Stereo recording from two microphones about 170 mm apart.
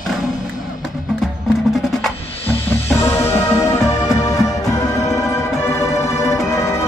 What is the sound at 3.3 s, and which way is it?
Music, 20° left (ahead or behind).